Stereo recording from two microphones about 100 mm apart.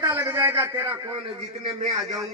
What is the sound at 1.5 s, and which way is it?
Speech, 90° right.